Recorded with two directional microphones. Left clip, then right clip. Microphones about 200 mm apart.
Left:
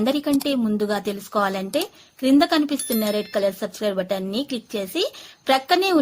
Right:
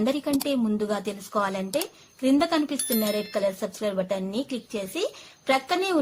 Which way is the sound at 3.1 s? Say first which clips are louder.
Left 6 dB; 25° left (ahead or behind).